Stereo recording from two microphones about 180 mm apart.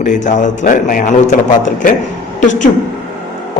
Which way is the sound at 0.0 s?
45° left (ahead or behind).